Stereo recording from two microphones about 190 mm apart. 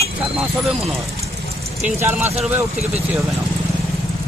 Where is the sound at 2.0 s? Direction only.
10° right (ahead or behind).